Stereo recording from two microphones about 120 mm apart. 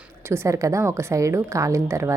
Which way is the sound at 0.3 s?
25° right (ahead or behind).